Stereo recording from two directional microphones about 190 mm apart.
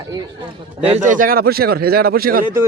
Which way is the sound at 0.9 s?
40° right (ahead or behind).